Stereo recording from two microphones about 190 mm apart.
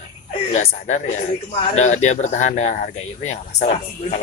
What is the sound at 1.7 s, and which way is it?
Speech, 40° left (ahead or behind).